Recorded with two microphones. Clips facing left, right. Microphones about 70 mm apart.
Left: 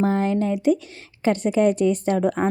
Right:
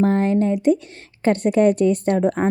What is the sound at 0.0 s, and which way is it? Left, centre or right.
A woman's voice, right.